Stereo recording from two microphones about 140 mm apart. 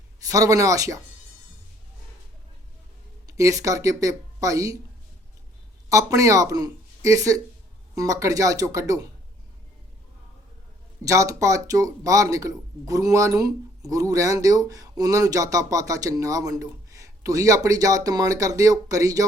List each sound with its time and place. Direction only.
0.3 s speech: 25° right (ahead or behind)
3.2 s speech: 25° right (ahead or behind)
5.9 s speech: 25° right (ahead or behind)
11.0 s speech: 25° right (ahead or behind)